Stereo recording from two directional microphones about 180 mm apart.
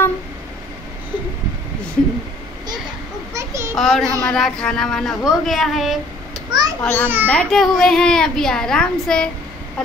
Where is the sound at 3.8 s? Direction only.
Centre (ahead or behind).